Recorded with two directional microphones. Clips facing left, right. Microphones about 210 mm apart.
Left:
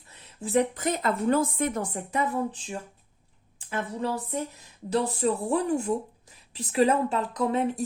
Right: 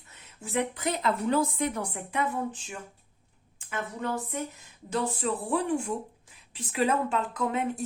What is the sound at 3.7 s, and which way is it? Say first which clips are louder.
A woman's voice: left 3 dB; 30° left (ahead or behind).